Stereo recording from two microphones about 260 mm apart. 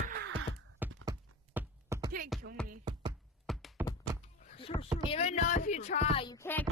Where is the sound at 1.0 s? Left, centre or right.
Centre.